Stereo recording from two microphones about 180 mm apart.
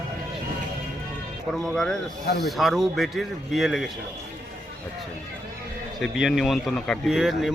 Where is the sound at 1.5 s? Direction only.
Centre (ahead or behind).